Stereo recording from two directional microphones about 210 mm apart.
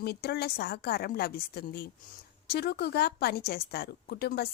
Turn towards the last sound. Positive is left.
turn(degrees=50)  # may be behind; listen again after turning